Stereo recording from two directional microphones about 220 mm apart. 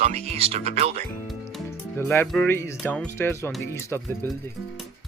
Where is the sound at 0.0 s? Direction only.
30° right (ahead or behind).